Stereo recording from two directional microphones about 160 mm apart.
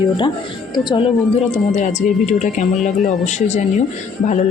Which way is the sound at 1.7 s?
45° left (ahead or behind).